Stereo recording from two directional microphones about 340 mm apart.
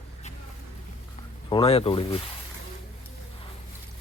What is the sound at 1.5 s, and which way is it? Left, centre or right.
Speech, centre.